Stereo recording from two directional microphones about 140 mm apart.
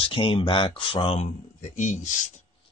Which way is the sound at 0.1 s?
35° left (ahead or behind).